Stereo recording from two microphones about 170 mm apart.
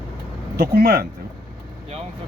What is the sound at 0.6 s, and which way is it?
Speech, 65° right (ahead or behind).